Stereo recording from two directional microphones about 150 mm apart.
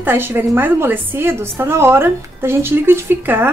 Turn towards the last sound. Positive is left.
turn(degrees=-15)  # may be behind; listen again after turning